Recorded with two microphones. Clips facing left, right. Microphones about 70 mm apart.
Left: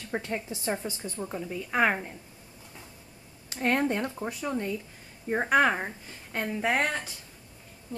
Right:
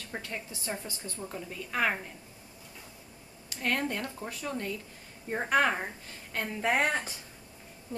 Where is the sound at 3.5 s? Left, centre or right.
Left.